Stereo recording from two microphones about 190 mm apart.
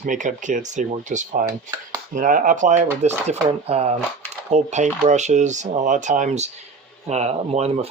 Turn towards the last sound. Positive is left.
turn(degrees=-35)  # may be behind; listen again after turning